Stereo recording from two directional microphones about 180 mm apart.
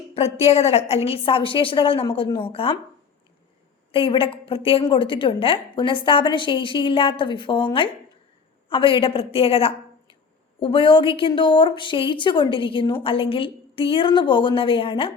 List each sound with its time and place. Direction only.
0.1 s a woman's voice: 35° left (ahead or behind)
3.9 s a woman's voice: 30° left (ahead or behind)